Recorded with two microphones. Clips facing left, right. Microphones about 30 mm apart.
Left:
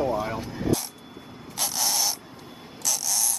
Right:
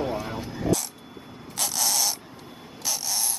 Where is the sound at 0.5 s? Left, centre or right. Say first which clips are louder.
Right 2 dB; centre.